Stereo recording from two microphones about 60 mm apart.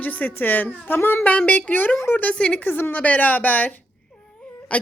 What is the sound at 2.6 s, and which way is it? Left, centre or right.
Speech, left.